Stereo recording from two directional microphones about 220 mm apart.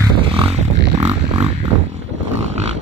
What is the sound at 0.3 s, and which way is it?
Music, 25° right (ahead or behind).